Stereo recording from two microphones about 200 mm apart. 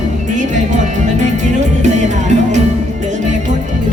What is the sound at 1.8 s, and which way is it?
Music, 35° right (ahead or behind).